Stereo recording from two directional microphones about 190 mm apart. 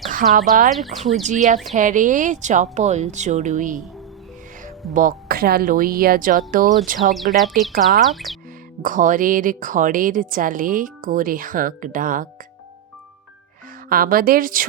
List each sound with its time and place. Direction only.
0.2 s a woman's voice: 45° right (ahead or behind)
0.7 s speech: centre (ahead or behind)
1.3 s speech: 40° right (ahead or behind)
4.9 s a woman's voice: 50° right (ahead or behind)
7.3 s speech: centre (ahead or behind)
8.8 s a woman's voice: 45° right (ahead or behind)
13.9 s a woman's voice: 50° right (ahead or behind)